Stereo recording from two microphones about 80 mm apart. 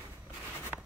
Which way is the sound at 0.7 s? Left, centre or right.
Centre.